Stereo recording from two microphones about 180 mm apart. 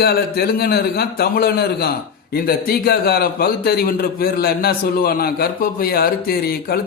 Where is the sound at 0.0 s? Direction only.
60° left (ahead or behind).